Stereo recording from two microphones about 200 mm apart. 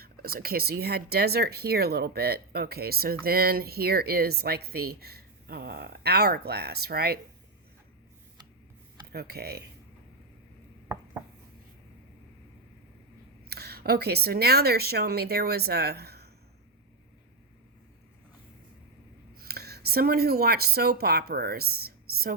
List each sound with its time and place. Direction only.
0.0 s speech: 50° right (ahead or behind)
9.1 s speech: 50° right (ahead or behind)
13.5 s speech: 50° right (ahead or behind)
19.4 s speech: 50° right (ahead or behind)